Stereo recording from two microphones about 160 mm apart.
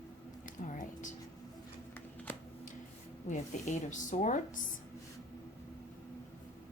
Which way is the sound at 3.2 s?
50° left (ahead or behind).